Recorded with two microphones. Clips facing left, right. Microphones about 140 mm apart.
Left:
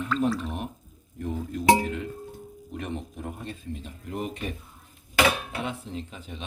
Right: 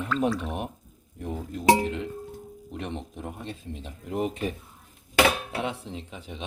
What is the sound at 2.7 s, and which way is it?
Speech, 25° right (ahead or behind).